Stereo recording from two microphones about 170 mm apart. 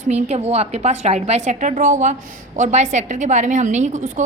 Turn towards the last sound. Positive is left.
turn(degrees=-45)  # may be behind; listen again after turning